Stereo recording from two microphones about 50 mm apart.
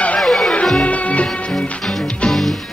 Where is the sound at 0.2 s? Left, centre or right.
Centre.